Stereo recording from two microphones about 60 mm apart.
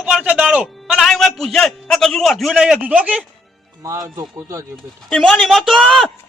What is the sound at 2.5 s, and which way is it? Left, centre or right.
Speech, centre.